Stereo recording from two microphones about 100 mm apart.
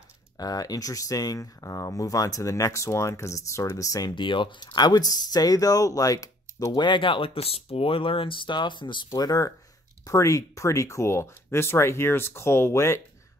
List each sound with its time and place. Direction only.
0.4 s speech: 40° left (ahead or behind)
4.1 s speech: 55° left (ahead or behind)
9.1 s speech: 35° left (ahead or behind)